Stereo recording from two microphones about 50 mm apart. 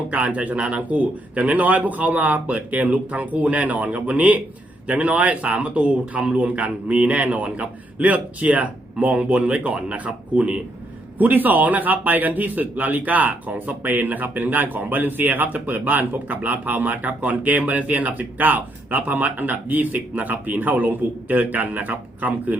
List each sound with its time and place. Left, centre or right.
0.1 s a man's voice: right
11.2 s a man's voice: right